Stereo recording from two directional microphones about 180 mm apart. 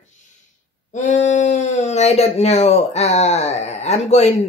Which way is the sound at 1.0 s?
40° left (ahead or behind).